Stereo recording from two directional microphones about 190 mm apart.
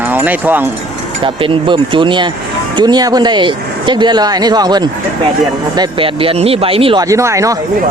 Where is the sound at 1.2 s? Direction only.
25° right (ahead or behind).